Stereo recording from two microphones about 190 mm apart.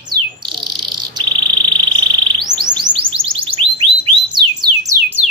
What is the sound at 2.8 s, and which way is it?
Music, 25° right (ahead or behind).